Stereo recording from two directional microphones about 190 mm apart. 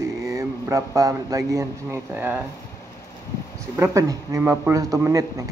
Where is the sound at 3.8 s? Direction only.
15° right (ahead or behind).